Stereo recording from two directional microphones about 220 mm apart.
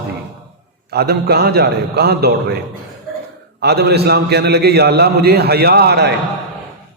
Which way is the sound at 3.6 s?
45° right (ahead or behind).